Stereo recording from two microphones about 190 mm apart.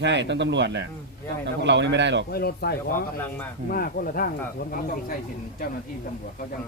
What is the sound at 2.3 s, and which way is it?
Speech, 55° left (ahead or behind).